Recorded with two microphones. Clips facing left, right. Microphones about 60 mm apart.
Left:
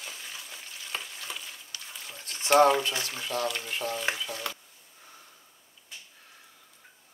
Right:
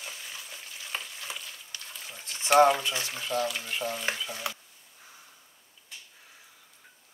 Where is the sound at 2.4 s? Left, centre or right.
Centre.